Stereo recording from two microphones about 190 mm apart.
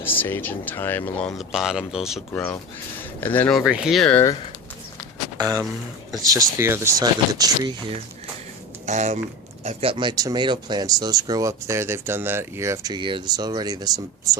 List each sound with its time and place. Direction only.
0.0 s speech: 10° left (ahead or behind)
2.3 s speech: 10° left (ahead or behind)
5.4 s speech: 20° right (ahead or behind)
8.9 s speech: 40° right (ahead or behind); by 14.3 s 20° right (ahead or behind)